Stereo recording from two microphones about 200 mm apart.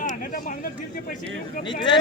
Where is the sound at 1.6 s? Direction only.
25° left (ahead or behind).